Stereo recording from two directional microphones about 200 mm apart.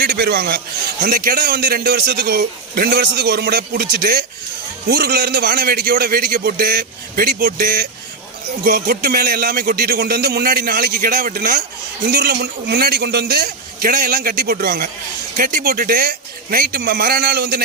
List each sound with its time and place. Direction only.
0.0 s a man's voice: 55° right (ahead or behind)